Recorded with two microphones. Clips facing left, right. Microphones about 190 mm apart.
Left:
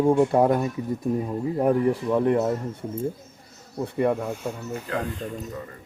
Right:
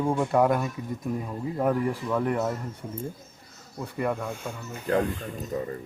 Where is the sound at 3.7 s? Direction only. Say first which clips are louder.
Left 6 dB; 30° left (ahead or behind).